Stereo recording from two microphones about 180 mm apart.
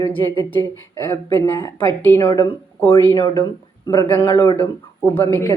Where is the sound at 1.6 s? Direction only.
20° left (ahead or behind).